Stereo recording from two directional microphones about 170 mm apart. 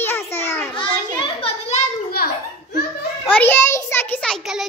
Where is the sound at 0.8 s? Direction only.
35° left (ahead or behind).